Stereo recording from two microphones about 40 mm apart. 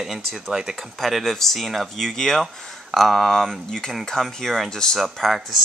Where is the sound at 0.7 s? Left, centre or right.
Centre.